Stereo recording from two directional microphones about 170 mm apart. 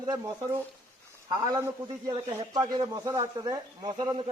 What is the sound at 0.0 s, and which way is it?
A man's voice, 20° right (ahead or behind).